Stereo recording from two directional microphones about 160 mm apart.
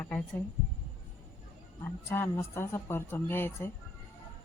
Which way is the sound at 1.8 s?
15° left (ahead or behind).